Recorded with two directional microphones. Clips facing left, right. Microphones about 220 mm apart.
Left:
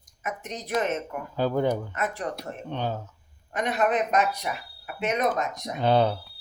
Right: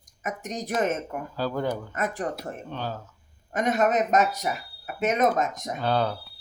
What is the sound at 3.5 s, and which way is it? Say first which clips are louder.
Speech: right 2 dB; 45° right (ahead or behind).